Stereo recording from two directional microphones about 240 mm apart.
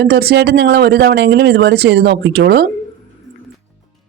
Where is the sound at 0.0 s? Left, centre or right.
Right.